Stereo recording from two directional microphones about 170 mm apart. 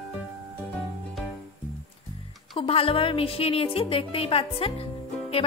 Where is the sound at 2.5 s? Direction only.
35° left (ahead or behind).